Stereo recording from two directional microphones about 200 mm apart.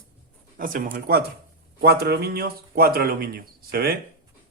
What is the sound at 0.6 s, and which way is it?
Speech, 45° right (ahead or behind).